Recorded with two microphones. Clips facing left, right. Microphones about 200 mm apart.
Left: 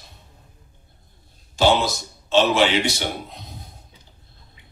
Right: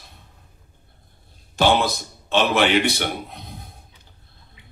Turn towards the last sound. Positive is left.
turn(degrees=-55)  # may be behind; listen again after turning